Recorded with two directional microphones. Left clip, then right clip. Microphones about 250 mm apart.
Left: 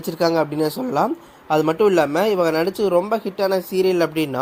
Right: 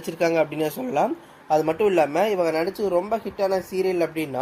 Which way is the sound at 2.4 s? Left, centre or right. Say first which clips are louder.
Left 4 dB; left.